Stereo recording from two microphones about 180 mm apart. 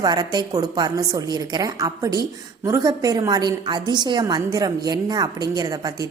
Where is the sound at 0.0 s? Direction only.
25° right (ahead or behind).